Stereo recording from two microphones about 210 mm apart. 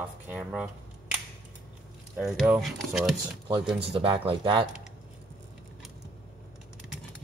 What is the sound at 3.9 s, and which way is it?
Speech, 25° right (ahead or behind).